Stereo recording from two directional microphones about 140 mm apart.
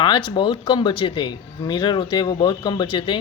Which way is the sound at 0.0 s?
35° left (ahead or behind).